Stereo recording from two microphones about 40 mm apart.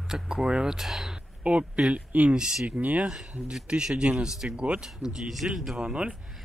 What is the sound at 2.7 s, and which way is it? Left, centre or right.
Speech, right.